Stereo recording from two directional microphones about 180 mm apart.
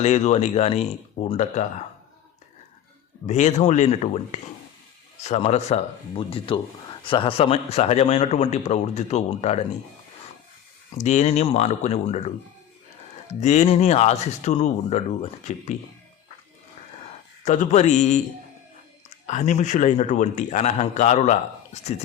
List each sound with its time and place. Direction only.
0.0 s a man's voice: 35° left (ahead or behind)
3.2 s a man's voice: 40° left (ahead or behind)
10.9 s a man's voice: 40° left (ahead or behind)
17.4 s a man's voice: 40° left (ahead or behind)
19.3 s a man's voice: 40° left (ahead or behind)